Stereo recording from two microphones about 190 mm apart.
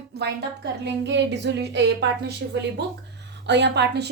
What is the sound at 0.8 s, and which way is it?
A woman's voice, 65° right (ahead or behind).